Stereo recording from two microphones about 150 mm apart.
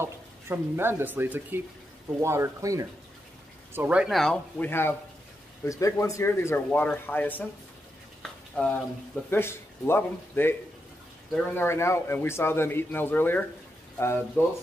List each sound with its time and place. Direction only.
0.0 s speech: 15° right (ahead or behind)
3.7 s a man's voice: 10° right (ahead or behind); by 7.4 s 10° left (ahead or behind)
8.2 s frying: 5° left (ahead or behind)
9.3 s a man's voice: 15° left (ahead or behind)